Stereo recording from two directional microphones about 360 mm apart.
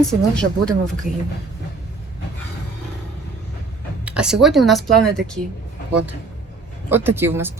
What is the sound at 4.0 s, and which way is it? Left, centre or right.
Speech, centre.